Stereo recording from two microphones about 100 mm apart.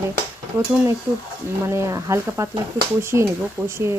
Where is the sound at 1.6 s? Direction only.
30° right (ahead or behind).